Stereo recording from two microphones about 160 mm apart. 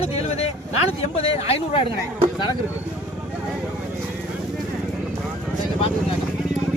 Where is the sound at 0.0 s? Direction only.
40° left (ahead or behind).